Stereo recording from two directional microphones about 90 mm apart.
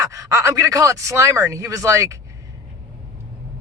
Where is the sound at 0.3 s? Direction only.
40° right (ahead or behind).